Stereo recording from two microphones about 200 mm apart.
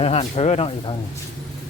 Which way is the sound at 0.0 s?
30° left (ahead or behind).